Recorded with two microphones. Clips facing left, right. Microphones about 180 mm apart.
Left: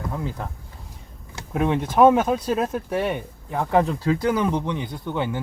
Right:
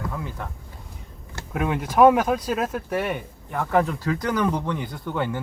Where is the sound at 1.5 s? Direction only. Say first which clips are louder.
Left 1 dB; 30° left (ahead or behind).